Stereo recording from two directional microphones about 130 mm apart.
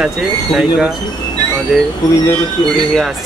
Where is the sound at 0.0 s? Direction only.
5° right (ahead or behind).